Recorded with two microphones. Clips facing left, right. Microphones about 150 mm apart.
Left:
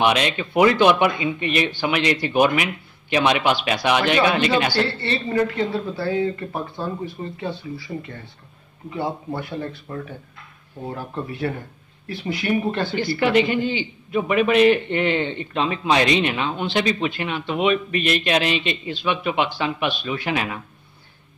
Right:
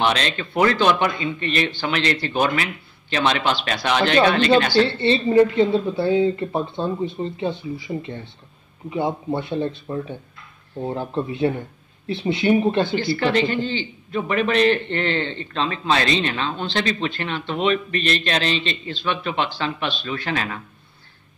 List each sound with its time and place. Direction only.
0.0 s a man's voice: 10° left (ahead or behind)
4.8 s speech: 20° right (ahead or behind)
12.9 s a man's voice: 15° left (ahead or behind)